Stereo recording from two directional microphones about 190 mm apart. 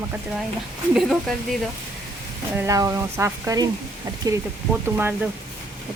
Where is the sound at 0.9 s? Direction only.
Centre (ahead or behind).